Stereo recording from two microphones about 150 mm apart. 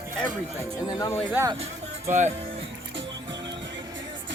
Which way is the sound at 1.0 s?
20° left (ahead or behind).